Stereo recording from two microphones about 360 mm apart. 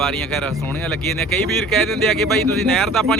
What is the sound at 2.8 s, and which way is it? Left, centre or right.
Speech, centre.